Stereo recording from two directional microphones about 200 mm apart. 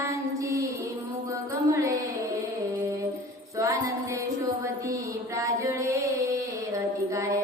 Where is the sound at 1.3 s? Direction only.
15° right (ahead or behind).